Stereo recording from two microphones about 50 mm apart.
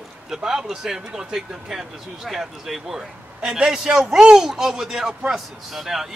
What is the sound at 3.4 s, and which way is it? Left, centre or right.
A man's voice, centre.